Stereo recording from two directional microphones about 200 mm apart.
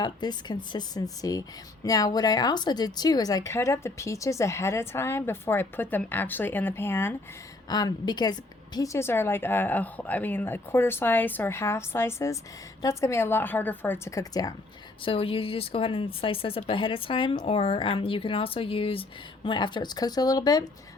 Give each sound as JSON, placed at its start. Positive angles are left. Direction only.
{"t": 0.0, "sound": "a woman's voice", "side_deg": 20}